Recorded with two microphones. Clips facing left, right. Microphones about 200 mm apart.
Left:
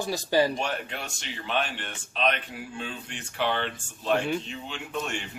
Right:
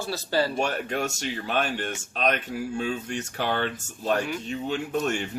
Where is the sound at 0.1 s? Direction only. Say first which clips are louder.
Left 2 dB; 15° left (ahead or behind).